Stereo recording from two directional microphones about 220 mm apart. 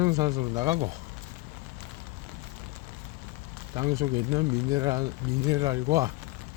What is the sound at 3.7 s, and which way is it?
Speech, 15° right (ahead or behind).